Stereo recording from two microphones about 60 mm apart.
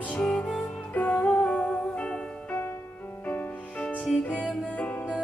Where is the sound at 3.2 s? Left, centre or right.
Left.